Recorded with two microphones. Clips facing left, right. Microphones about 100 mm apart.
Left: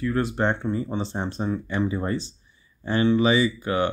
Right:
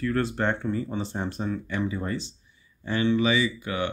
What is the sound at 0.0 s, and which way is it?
Speech, 15° left (ahead or behind).